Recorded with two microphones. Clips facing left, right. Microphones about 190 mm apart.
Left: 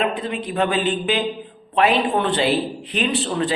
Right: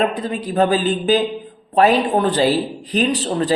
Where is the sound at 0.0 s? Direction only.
40° right (ahead or behind).